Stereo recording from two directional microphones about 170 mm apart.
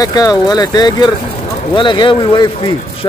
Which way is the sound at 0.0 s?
20° left (ahead or behind).